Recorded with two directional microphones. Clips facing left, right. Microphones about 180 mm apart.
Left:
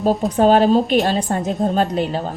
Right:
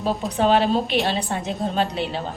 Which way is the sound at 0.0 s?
45° left (ahead or behind).